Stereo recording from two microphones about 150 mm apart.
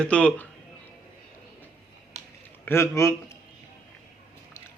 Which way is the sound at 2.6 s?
15° left (ahead or behind).